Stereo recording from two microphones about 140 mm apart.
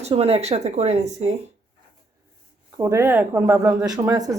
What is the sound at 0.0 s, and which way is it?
Speech, 45° right (ahead or behind).